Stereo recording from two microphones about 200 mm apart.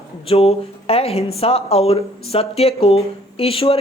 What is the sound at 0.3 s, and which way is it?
Speech, 30° left (ahead or behind).